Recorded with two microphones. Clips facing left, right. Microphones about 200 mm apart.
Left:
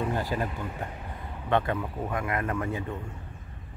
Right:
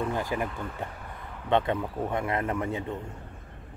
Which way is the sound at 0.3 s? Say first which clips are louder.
Right 1 dB; 15° right (ahead or behind).